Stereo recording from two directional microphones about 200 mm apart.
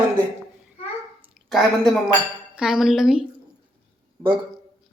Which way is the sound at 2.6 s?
5° right (ahead or behind).